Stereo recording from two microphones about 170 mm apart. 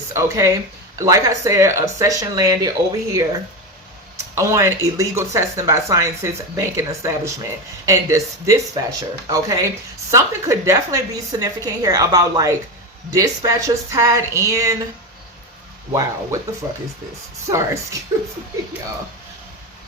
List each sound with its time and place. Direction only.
0.1 s a woman's voice: 15° right (ahead or behind)
15.9 s speech: 15° right (ahead or behind)
17.5 s speech: 15° right (ahead or behind)